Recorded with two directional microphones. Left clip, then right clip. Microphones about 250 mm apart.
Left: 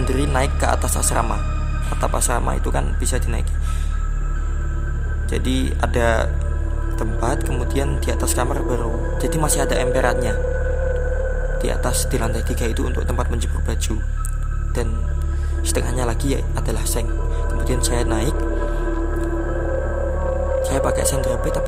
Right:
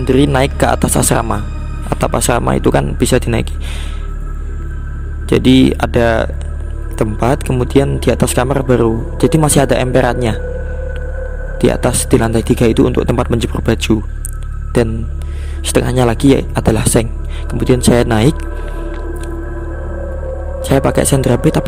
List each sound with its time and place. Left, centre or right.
0.0 s speech: right
5.3 s speech: right
11.5 s speech: right
20.6 s speech: right